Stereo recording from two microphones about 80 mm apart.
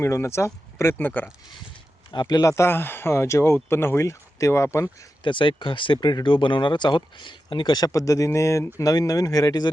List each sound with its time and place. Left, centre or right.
0.0 s speech: left
2.2 s speech: left
5.2 s speech: left
7.9 s speech: left
8.8 s speech: left